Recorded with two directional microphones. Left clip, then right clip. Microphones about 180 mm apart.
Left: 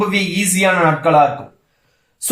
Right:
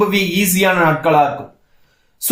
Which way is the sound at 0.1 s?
20° right (ahead or behind).